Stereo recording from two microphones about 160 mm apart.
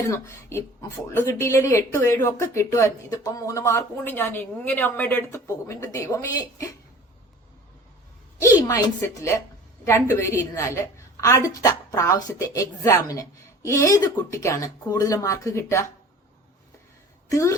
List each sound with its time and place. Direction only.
0.1 s speech: 20° left (ahead or behind)
8.6 s a woman's voice: 20° left (ahead or behind)
17.2 s a woman's voice: 20° left (ahead or behind)